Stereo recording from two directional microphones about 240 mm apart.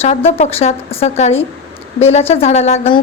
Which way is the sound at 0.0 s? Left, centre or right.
Left.